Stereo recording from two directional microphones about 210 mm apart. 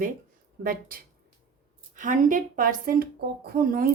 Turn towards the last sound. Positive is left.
turn(degrees=-45)  # may be behind; listen again after turning